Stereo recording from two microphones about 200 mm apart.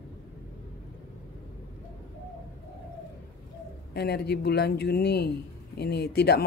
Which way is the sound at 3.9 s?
55° left (ahead or behind).